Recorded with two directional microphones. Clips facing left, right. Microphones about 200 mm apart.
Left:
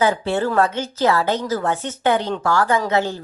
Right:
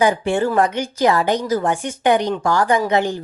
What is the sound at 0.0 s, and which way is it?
Speech, 15° right (ahead or behind).